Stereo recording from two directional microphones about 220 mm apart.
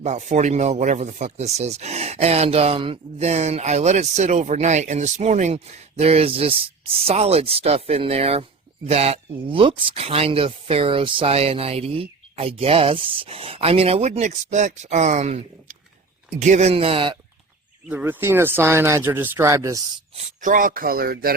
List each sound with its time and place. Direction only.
0.0 s speech: 30° right (ahead or behind)
17.8 s speech: 5° right (ahead or behind)
20.1 s speech: 35° right (ahead or behind)